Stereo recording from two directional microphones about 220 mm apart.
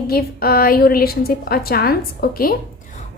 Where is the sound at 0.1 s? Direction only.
45° left (ahead or behind).